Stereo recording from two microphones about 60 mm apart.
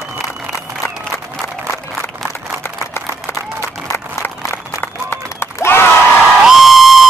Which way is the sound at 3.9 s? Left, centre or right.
Left.